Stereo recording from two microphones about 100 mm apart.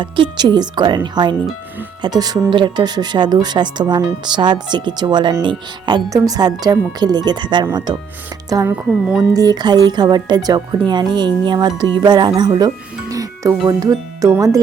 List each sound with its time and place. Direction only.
0.0 s speech: 55° right (ahead or behind)
6.1 s speech: 35° right (ahead or behind)
12.4 s music: 45° right (ahead or behind)
13.7 s speech: 35° right (ahead or behind)